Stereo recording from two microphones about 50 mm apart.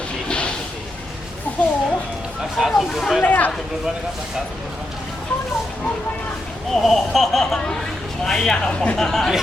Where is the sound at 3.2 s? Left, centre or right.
Left.